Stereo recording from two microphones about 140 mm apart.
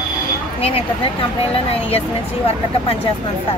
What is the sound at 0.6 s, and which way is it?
Speech, 45° left (ahead or behind).